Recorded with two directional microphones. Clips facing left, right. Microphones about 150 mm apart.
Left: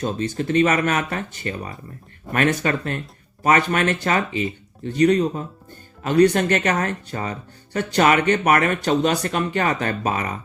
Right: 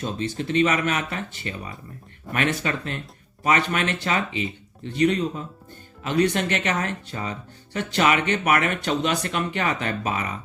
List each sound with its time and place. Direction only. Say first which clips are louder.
0.0 s speech: left 4 dB; 45° left (ahead or behind)